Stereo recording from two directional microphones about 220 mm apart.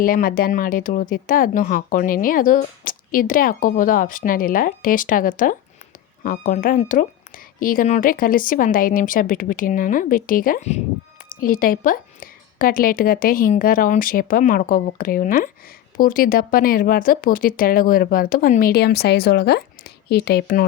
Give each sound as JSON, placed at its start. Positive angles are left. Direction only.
{"t": 0.0, "sound": "speech", "side_deg": 40}